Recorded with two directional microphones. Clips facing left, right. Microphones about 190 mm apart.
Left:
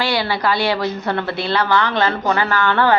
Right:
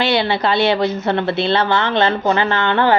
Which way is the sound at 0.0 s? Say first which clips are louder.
Right 3 dB; 25° right (ahead or behind).